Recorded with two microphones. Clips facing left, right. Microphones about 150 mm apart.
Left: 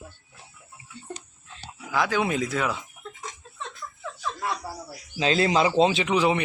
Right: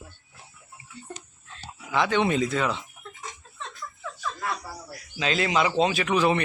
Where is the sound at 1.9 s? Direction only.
5° left (ahead or behind).